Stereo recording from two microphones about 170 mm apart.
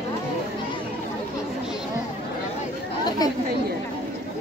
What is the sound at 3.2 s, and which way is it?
Chatter, 20° left (ahead or behind).